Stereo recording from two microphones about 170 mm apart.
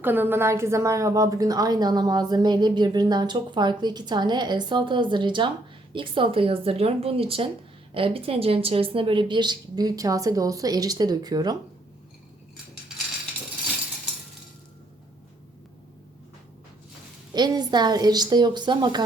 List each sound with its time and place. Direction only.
0.0 s a woman's voice: 10° right (ahead or behind)
17.3 s a woman's voice: 25° right (ahead or behind)